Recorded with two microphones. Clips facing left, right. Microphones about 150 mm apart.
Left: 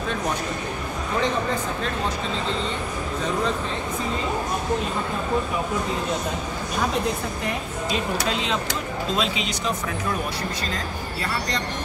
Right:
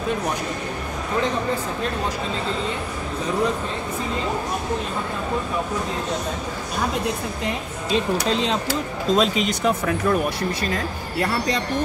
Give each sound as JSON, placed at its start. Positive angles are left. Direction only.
{"t": 8.3, "sound": "speech", "side_deg": -35}